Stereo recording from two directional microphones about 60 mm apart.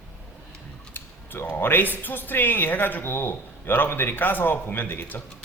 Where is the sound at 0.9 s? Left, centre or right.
Left.